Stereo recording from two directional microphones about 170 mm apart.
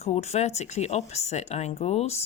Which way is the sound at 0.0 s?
40° left (ahead or behind).